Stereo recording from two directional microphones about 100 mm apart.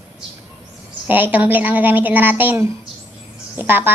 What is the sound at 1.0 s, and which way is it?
Speech, 20° right (ahead or behind).